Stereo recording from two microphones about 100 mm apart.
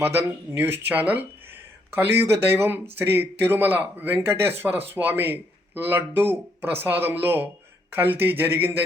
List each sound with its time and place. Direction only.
0.0 s a man's voice: 25° right (ahead or behind)